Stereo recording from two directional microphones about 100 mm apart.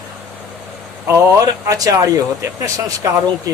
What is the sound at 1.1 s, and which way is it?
Speech, 30° right (ahead or behind).